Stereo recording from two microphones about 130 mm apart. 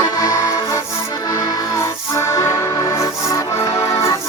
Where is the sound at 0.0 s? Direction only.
30° left (ahead or behind).